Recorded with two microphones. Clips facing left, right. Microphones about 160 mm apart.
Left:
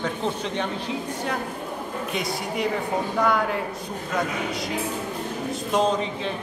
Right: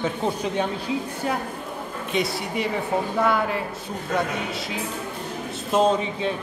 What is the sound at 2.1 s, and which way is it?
A man's voice, centre (ahead or behind).